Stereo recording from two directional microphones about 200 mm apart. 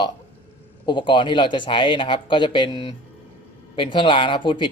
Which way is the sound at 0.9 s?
25° left (ahead or behind).